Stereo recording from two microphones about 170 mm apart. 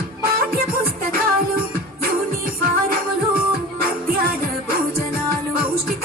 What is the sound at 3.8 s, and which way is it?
Music, 60° right (ahead or behind).